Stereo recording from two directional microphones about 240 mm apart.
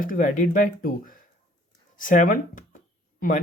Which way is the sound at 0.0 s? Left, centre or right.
Left.